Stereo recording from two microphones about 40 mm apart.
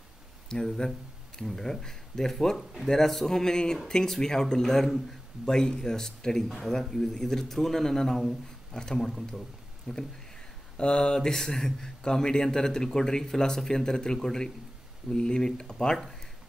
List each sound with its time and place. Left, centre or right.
0.5 s speech: centre
6.5 s speech: centre
9.9 s speech: left; by 16.2 s centre